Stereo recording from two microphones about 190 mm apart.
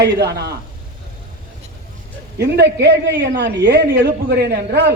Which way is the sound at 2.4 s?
60° right (ahead or behind).